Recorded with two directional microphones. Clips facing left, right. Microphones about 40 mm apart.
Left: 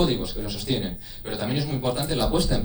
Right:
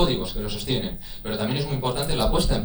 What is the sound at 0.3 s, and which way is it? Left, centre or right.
Speech, right.